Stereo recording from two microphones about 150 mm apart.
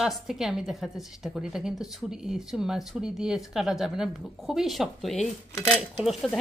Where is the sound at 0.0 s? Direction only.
Centre (ahead or behind).